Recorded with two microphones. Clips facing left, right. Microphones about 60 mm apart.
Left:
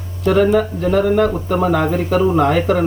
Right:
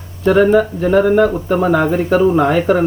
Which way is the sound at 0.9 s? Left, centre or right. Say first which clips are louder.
Right 3 dB; centre.